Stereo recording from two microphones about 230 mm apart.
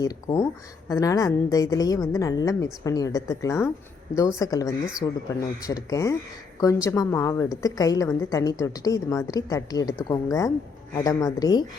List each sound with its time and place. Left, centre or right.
0.0 s a woman's voice: centre